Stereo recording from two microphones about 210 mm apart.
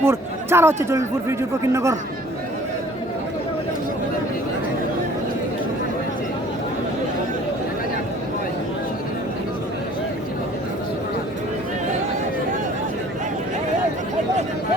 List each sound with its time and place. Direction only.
0.0 s a man's voice: 10° right (ahead or behind)